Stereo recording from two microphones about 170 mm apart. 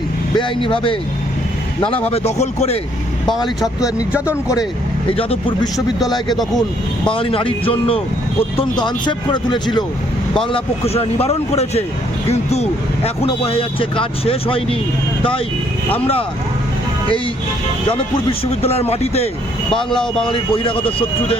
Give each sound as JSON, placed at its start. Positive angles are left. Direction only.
{"t": 0.3, "sound": "speech", "side_deg": 30}
{"t": 2.0, "sound": "speech", "side_deg": 35}
{"t": 3.6, "sound": "speech", "side_deg": -5}
{"t": 5.1, "sound": "speech", "side_deg": 35}
{"t": 6.3, "sound": "speech", "side_deg": 0}
{"t": 7.1, "sound": "speech", "side_deg": 30}
{"t": 10.5, "sound": "speech", "side_deg": 35}
{"t": 17.8, "sound": "speech", "side_deg": 35}
{"t": 19.7, "sound": "speech", "side_deg": 5}
{"t": 20.7, "sound": "speech", "side_deg": 30}